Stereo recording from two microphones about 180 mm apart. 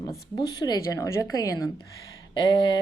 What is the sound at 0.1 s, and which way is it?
Speech, 20° left (ahead or behind).